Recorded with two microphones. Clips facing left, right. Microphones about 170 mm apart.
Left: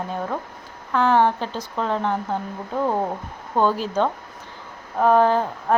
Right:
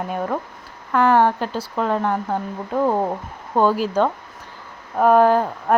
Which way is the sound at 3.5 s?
10° right (ahead or behind).